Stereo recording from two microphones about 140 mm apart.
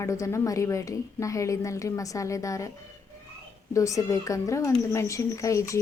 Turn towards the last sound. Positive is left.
turn(degrees=20)  # may be behind; listen again after turning